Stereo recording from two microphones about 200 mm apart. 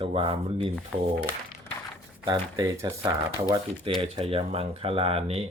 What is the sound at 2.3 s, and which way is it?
Speech, 20° right (ahead or behind).